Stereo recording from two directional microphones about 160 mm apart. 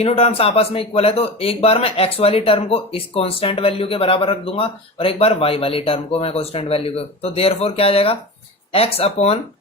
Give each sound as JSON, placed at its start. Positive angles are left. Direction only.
{"t": 0.0, "sound": "a man's voice", "side_deg": 40}